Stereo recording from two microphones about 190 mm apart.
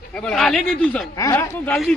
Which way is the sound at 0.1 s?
5° left (ahead or behind).